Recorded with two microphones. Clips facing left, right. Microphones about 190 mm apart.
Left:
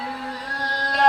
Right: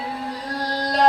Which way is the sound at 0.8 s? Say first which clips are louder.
Right 4 dB; 35° right (ahead or behind).